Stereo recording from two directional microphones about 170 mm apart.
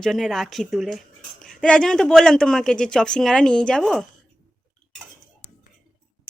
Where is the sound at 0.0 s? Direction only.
Centre (ahead or behind).